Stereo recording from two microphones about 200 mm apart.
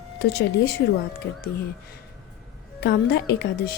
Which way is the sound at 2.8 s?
55° left (ahead or behind).